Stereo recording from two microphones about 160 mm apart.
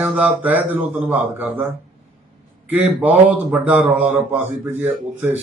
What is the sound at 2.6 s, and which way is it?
Speech, 10° right (ahead or behind).